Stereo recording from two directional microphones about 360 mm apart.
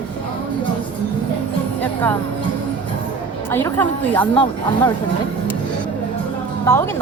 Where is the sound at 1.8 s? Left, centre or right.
Centre.